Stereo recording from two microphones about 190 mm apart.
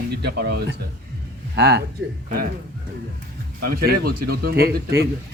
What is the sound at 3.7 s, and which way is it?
Speech, 55° right (ahead or behind).